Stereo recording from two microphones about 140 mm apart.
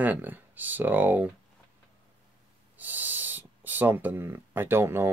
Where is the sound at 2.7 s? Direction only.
15° right (ahead or behind).